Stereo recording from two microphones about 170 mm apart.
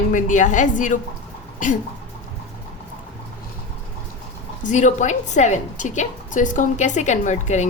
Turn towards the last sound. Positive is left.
turn(degrees=45)  # may be behind; listen again after turning